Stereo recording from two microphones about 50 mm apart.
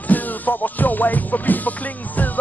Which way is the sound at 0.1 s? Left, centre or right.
Left.